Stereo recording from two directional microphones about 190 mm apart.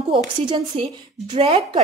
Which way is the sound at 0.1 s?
25° right (ahead or behind).